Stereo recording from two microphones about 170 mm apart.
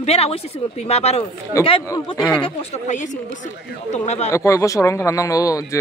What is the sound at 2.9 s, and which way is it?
Speech, 45° left (ahead or behind).